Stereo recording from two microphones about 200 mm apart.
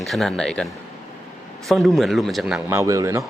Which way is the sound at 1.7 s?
Centre (ahead or behind).